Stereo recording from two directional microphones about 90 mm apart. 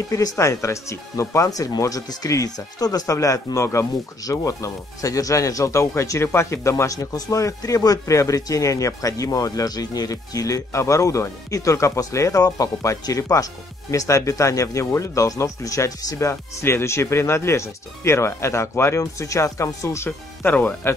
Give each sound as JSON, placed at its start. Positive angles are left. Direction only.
{"t": 0.1, "sound": "speech", "side_deg": 40}
{"t": 20.1, "sound": "speech", "side_deg": 20}